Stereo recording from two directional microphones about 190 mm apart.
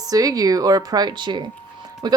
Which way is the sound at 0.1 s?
20° right (ahead or behind).